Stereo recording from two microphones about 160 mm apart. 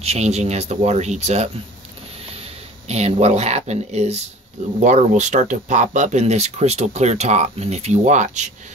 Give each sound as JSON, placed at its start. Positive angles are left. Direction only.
{"t": 0.0, "sound": "speech", "side_deg": -40}
{"t": 2.9, "sound": "speech", "side_deg": -40}